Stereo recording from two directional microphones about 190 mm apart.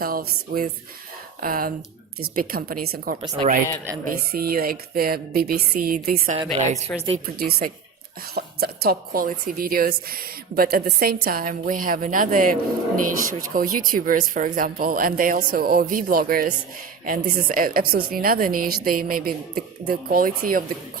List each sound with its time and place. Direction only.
0.0 s a woman's voice: 50° right (ahead or behind)
3.2 s a woman's voice: 30° right (ahead or behind)
4.3 s a woman's voice: 50° right (ahead or behind)
6.6 s a woman's voice: 35° right (ahead or behind)
7.3 s a woman's voice: 55° right (ahead or behind)